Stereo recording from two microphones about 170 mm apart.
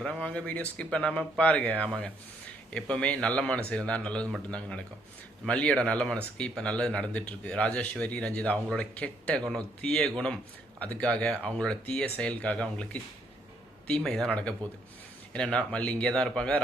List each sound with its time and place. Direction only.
0.0 s a man's voice: 5° left (ahead or behind)
2.7 s a man's voice: 5° left (ahead or behind)